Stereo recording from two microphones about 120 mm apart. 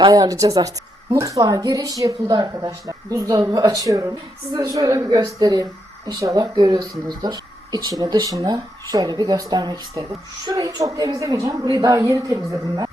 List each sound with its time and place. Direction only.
0.1 s a woman's voice: 30° right (ahead or behind)